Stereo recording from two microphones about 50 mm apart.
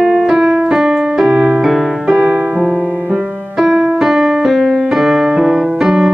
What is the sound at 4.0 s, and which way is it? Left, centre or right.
Piano, centre.